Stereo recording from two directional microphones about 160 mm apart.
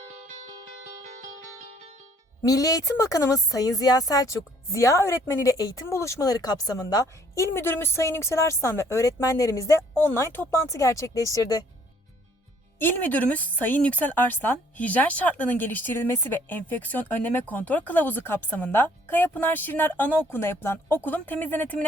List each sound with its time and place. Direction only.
0.3 s music: 50° right (ahead or behind)
2.4 s speech: 20° left (ahead or behind)
12.8 s a woman's voice: 10° left (ahead or behind)